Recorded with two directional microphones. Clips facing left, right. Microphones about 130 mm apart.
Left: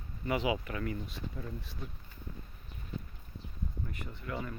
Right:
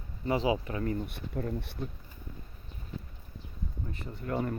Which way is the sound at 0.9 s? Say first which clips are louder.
Right 6 dB; 60° right (ahead or behind).